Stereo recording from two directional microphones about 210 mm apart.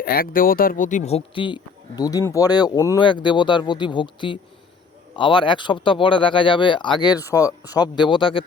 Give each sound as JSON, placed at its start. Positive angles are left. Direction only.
{"t": 0.0, "sound": "speech", "side_deg": 45}